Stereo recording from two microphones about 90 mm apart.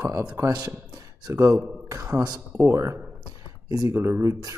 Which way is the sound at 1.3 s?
35° right (ahead or behind).